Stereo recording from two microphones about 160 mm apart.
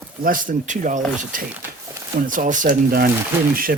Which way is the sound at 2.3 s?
55° right (ahead or behind).